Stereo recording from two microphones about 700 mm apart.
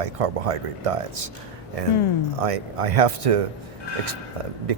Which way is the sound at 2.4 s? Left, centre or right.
Right.